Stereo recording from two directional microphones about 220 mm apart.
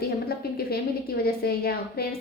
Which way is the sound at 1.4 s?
45° left (ahead or behind).